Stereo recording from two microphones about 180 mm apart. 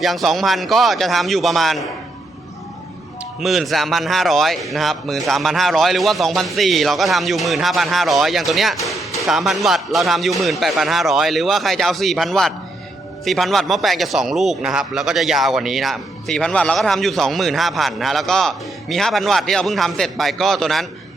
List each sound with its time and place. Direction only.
0.0 s a man's voice: centre (ahead or behind)
3.4 s a man's voice: centre (ahead or behind)